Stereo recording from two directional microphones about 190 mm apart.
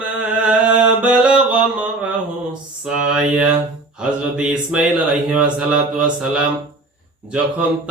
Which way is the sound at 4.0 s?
5° right (ahead or behind).